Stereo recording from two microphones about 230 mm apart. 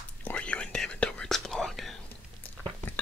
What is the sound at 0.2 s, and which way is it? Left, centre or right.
Whispering, centre.